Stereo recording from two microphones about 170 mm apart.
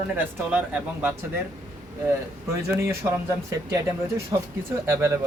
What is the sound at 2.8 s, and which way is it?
Speech, 15° right (ahead or behind).